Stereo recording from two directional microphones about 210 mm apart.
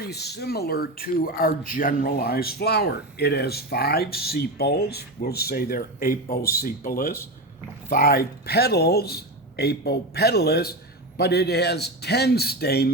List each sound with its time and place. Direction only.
0.1 s speech: 50° left (ahead or behind)